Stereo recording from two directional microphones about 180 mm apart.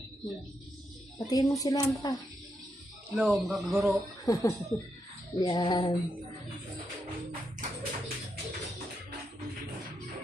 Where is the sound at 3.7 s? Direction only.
10° right (ahead or behind).